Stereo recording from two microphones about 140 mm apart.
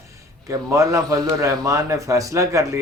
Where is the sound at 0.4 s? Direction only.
20° right (ahead or behind).